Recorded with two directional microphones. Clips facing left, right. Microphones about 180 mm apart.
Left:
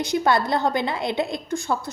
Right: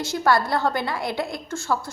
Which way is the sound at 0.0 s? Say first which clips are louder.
Left 1 dB; 20° left (ahead or behind).